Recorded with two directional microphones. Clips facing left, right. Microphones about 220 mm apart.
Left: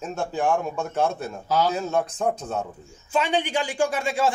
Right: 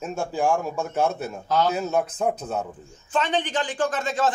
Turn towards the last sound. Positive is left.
turn(degrees=10)  # may be behind; listen again after turning